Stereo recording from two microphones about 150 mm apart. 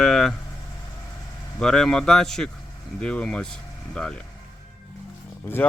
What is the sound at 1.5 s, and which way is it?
Speech, 5° left (ahead or behind).